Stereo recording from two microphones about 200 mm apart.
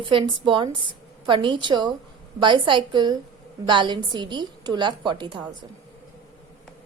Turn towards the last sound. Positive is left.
turn(degrees=-25)  # may be behind; listen again after turning